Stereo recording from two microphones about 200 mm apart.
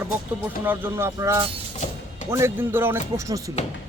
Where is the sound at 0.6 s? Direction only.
10° right (ahead or behind).